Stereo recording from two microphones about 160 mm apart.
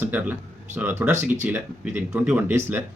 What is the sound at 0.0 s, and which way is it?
A man's voice, 10° right (ahead or behind).